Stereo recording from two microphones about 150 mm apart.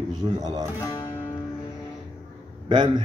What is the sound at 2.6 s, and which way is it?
Speech, 30° right (ahead or behind).